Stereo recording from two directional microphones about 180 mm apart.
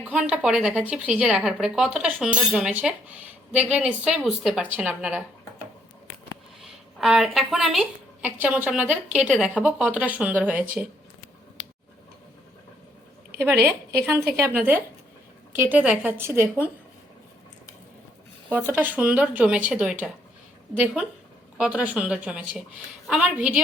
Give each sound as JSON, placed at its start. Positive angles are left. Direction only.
{"t": 0.1, "sound": "a woman's voice", "side_deg": -5}
{"t": 6.6, "sound": "a woman's voice", "side_deg": -5}
{"t": 13.5, "sound": "a woman's voice", "side_deg": -15}
{"t": 18.4, "sound": "a woman's voice", "side_deg": -10}